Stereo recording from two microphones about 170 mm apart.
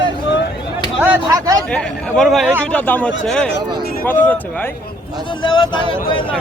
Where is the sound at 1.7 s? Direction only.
5° left (ahead or behind).